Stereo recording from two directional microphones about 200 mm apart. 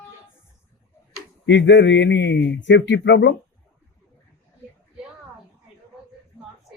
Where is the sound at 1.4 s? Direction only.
65° left (ahead or behind).